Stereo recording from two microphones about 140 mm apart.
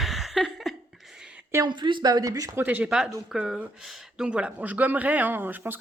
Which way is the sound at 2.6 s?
10° right (ahead or behind).